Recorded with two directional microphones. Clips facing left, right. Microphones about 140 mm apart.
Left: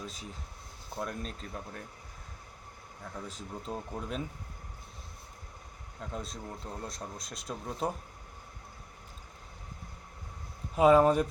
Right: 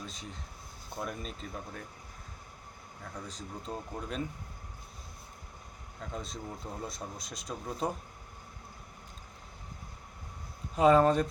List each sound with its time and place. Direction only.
0.0 s speech: 5° left (ahead or behind)
3.0 s speech: 5° left (ahead or behind)
6.1 s speech: centre (ahead or behind)
10.8 s speech: 10° left (ahead or behind)